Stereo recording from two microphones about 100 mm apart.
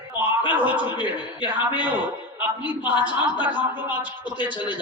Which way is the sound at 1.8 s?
15° right (ahead or behind).